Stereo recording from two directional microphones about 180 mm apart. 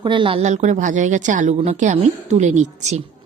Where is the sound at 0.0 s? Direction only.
25° right (ahead or behind).